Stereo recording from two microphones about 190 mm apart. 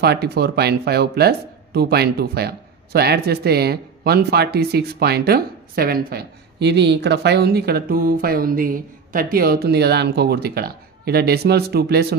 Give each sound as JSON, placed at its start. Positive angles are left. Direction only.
{"t": 0.0, "sound": "speech", "side_deg": -55}